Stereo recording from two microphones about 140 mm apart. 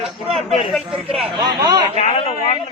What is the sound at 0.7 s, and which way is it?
Speech, centre (ahead or behind).